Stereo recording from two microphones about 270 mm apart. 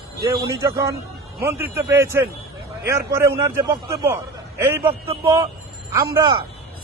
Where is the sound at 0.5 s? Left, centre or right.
Centre.